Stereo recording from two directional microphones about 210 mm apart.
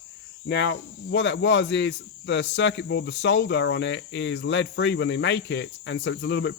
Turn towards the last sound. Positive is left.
turn(degrees=55)  # may be behind; listen again after turning